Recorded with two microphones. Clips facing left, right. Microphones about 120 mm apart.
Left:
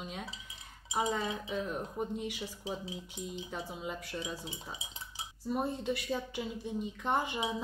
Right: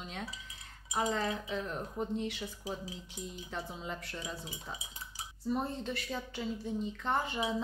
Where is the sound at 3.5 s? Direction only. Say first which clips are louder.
Right 3 dB; 5° left (ahead or behind).